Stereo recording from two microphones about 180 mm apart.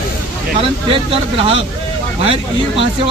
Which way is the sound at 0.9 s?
30° right (ahead or behind).